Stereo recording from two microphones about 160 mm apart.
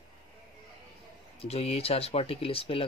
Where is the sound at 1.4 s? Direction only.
40° left (ahead or behind).